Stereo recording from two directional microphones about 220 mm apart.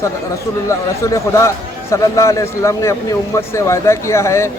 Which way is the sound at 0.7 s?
15° left (ahead or behind).